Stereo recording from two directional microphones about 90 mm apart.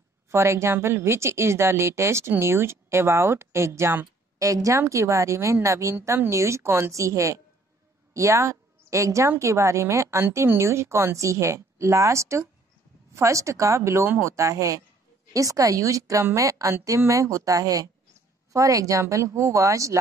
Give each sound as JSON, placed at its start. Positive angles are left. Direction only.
{"t": 0.3, "sound": "speech", "side_deg": -30}
{"t": 4.4, "sound": "a woman's voice", "side_deg": -40}